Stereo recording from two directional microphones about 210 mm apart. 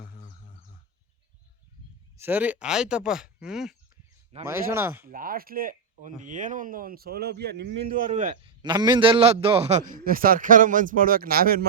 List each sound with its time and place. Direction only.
0.0 s a sound: 35° left (ahead or behind)
2.1 s speech: 10° right (ahead or behind)
5.0 s speech: 40° right (ahead or behind)
8.0 s a man's voice: 35° right (ahead or behind)
8.6 s a man's voice: 20° right (ahead or behind); by 11.6 s 45° right (ahead or behind)